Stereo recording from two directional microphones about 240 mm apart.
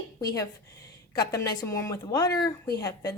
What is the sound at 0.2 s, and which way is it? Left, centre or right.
A woman's voice, centre.